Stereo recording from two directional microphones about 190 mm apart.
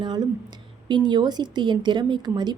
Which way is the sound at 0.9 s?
25° right (ahead or behind).